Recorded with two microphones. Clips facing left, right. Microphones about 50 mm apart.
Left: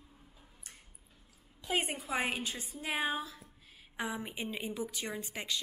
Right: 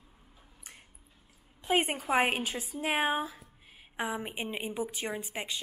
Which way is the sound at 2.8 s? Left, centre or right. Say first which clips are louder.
Right 5 dB; right.